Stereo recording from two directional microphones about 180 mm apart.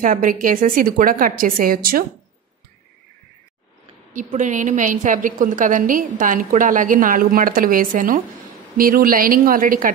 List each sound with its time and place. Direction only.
0.0 s a woman's voice: 50° right (ahead or behind)
4.1 s a woman's voice: 45° right (ahead or behind)